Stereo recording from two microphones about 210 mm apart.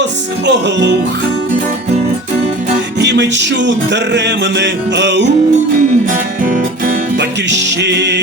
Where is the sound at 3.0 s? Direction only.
55° right (ahead or behind).